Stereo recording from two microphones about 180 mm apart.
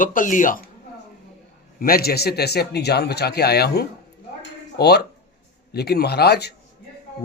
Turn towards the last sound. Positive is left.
turn(degrees=65)  # may be behind; listen again after turning